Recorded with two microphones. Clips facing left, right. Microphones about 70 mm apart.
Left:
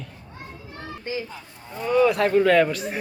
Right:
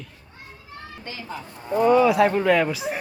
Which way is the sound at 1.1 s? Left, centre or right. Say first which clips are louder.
Left 9 dB; centre.